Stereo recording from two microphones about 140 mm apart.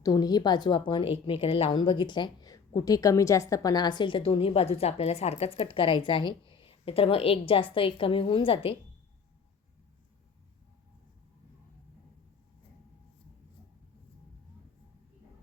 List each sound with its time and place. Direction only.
0.0 s a woman's voice: 25° left (ahead or behind)